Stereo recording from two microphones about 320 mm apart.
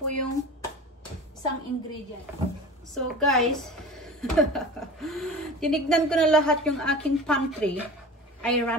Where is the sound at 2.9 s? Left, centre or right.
Centre.